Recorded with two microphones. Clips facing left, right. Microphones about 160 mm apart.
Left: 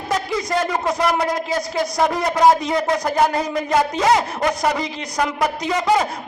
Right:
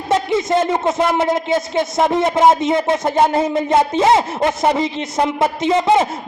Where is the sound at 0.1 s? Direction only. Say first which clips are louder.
Right 6 dB; 25° right (ahead or behind).